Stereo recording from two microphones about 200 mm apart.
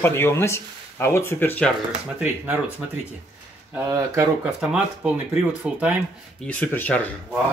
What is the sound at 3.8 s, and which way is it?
Speech, 15° right (ahead or behind).